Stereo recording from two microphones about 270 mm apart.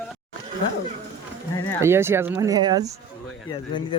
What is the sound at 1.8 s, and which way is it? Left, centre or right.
Speech, centre.